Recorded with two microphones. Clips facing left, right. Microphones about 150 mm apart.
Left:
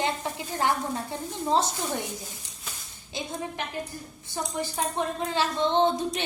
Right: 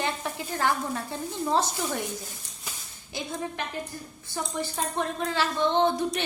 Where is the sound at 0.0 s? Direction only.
20° left (ahead or behind).